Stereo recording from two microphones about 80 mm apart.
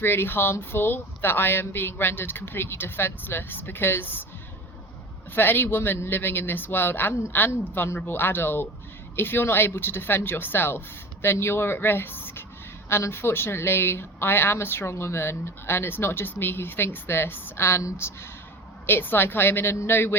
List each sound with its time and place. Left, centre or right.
0.0 s speech: left
5.3 s a woman's voice: left